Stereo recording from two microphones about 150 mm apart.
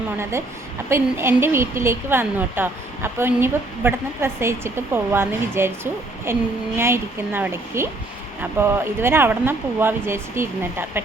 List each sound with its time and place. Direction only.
0.2 s speech: 20° right (ahead or behind)